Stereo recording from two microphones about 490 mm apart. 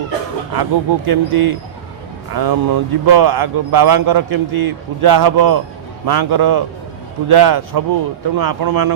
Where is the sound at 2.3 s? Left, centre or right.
Right.